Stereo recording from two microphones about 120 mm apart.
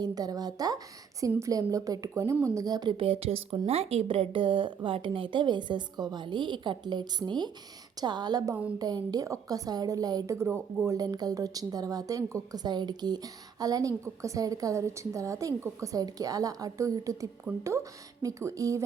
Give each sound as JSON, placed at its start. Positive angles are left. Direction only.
{"t": 0.0, "sound": "a woman's voice", "side_deg": -30}
{"t": 3.0, "sound": "a woman's voice", "side_deg": -50}
{"t": 10.3, "sound": "speech", "side_deg": -20}
{"t": 17.5, "sound": "speech", "side_deg": -10}
{"t": 18.2, "sound": "speech", "side_deg": -25}